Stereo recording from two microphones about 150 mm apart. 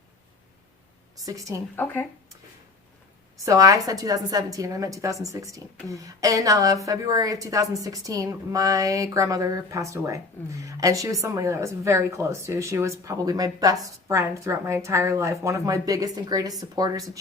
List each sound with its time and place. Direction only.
1.2 s a woman's voice: 25° right (ahead or behind)
1.7 s speech: 10° left (ahead or behind)
3.3 s a woman's voice: 20° right (ahead or behind)